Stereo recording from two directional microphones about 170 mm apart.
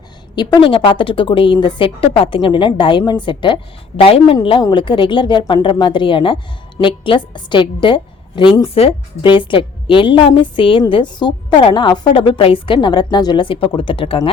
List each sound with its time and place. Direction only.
0.3 s a woman's voice: 30° left (ahead or behind)